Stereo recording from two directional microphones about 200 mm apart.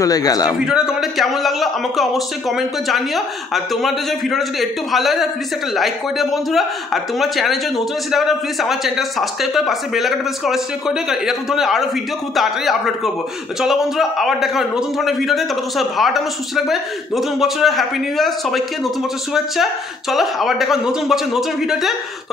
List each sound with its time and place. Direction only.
0.0 s a man's voice: 20° left (ahead or behind)
0.6 s a man's voice: 5° right (ahead or behind)